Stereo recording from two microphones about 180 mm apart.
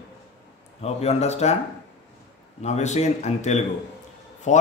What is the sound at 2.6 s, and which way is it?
Speech, 40° left (ahead or behind).